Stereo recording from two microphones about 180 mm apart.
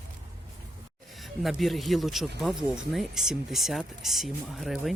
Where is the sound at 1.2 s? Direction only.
Centre (ahead or behind).